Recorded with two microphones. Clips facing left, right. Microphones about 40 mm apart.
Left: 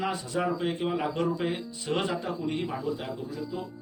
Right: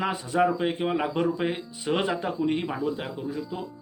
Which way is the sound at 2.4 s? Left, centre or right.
Right.